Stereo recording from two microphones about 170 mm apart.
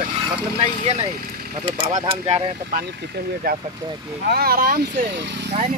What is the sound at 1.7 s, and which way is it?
Speech, 30° right (ahead or behind).